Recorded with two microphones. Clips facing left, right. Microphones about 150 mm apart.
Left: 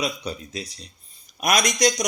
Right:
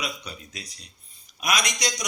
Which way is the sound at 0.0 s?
30° left (ahead or behind).